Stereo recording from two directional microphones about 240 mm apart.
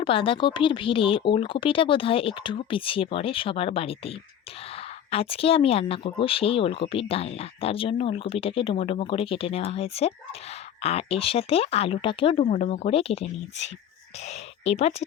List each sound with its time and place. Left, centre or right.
0.0 s speech: left
5.1 s speech: left